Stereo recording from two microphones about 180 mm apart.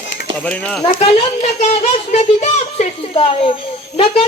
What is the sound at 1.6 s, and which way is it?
A child's voice, 40° left (ahead or behind).